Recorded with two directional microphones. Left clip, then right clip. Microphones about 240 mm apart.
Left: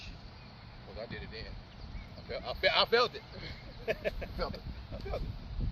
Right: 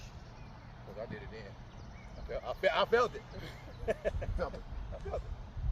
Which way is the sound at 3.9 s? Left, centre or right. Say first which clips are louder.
Even; left.